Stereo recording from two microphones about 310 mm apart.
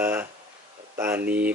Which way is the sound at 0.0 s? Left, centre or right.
Centre.